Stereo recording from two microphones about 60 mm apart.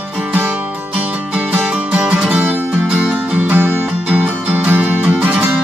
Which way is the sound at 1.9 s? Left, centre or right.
Right.